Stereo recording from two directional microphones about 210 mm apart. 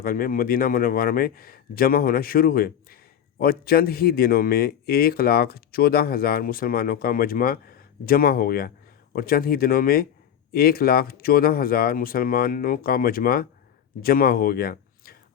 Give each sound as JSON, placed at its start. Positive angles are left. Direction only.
{"t": 0.0, "sound": "speech", "side_deg": 45}